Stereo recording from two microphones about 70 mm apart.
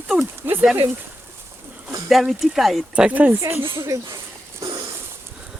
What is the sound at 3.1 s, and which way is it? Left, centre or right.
Speech, right.